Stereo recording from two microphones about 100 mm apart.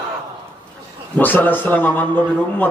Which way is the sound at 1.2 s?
20° left (ahead or behind).